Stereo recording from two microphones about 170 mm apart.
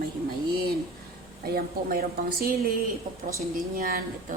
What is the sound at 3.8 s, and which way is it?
Speech, 60° right (ahead or behind).